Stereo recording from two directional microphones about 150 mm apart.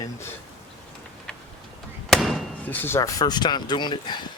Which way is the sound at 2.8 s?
20° left (ahead or behind).